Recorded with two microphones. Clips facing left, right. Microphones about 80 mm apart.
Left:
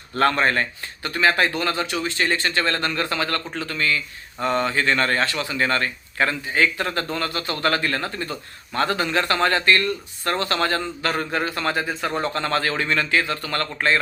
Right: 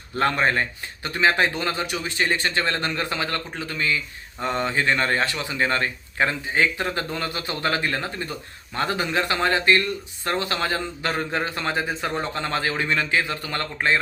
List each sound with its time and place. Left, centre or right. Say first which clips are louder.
0.2 s a man's voice: left 2 dB; centre